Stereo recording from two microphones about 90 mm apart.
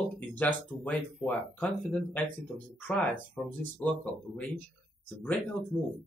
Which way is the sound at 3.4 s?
5° left (ahead or behind).